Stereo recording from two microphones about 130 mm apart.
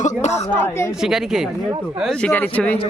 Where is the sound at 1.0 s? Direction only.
5° right (ahead or behind).